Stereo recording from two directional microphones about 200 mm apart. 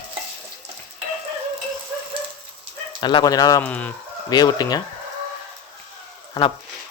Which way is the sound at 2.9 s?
20° left (ahead or behind).